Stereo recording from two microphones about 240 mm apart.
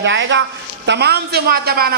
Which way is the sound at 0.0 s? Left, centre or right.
Right.